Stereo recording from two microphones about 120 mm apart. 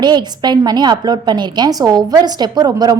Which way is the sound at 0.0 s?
35° right (ahead or behind).